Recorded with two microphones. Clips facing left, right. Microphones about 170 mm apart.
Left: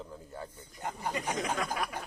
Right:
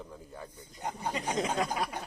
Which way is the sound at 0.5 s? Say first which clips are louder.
Right 5 dB; 20° right (ahead or behind).